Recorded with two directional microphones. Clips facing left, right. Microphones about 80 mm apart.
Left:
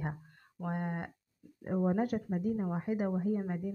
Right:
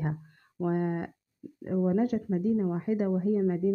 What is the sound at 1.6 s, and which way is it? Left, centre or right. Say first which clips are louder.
Speech: right 4 dB; left.